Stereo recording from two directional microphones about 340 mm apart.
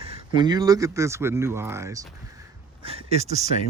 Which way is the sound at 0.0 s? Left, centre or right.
Centre.